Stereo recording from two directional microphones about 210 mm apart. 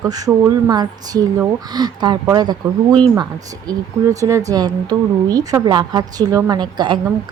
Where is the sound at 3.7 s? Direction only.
15° right (ahead or behind).